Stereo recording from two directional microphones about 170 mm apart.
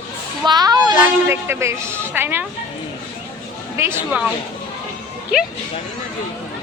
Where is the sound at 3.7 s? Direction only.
15° right (ahead or behind).